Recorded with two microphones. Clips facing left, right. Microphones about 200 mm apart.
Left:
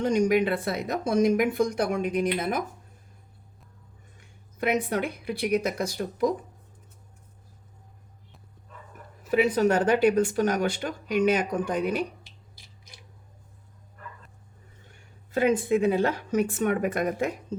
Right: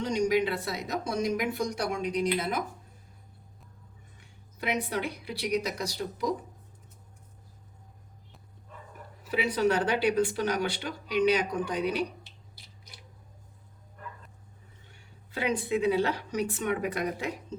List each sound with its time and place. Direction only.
0.0 s speech: 55° left (ahead or behind)
4.5 s speech: 50° left (ahead or behind)
9.3 s speech: 50° left (ahead or behind)
15.3 s speech: 45° left (ahead or behind)